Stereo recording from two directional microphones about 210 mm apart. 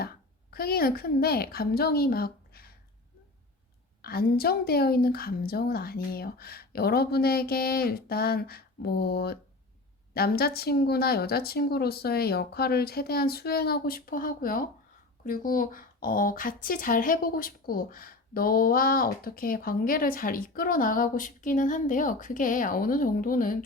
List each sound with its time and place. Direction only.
0.5 s a woman's voice: 45° left (ahead or behind)
4.0 s speech: 45° left (ahead or behind)